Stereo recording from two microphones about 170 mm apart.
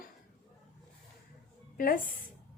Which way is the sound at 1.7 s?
55° left (ahead or behind).